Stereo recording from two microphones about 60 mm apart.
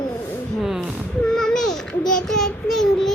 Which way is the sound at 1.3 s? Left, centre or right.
Centre.